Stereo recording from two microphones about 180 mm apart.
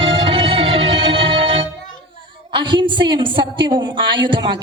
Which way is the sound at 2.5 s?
25° right (ahead or behind).